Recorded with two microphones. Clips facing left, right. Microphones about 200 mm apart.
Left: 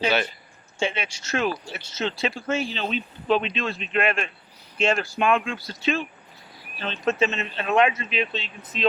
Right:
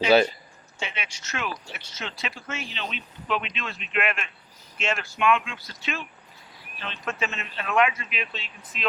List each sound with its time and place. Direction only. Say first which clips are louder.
0.8 s speech: left 9 dB; 30° left (ahead or behind)